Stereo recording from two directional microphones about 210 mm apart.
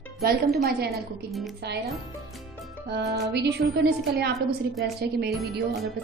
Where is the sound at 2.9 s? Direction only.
50° right (ahead or behind).